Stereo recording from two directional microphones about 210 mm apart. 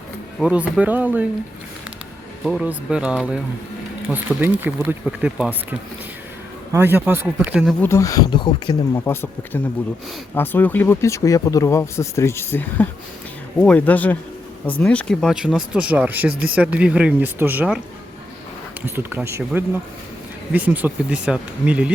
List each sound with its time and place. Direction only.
0.3 s speech: 5° right (ahead or behind)
2.4 s speech: 5° right (ahead or behind)
6.7 s speech: 10° right (ahead or behind)
7.8 s speech: 15° left (ahead or behind)
9.0 s speech: 10° left (ahead or behind); by 17.7 s 10° right (ahead or behind)
18.9 s speech: 10° right (ahead or behind)